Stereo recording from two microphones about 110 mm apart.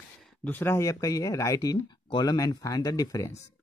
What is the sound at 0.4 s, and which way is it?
Speech, 20° left (ahead or behind).